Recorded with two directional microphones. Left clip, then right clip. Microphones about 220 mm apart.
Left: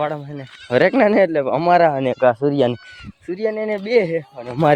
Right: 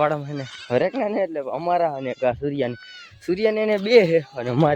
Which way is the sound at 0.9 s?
50° left (ahead or behind).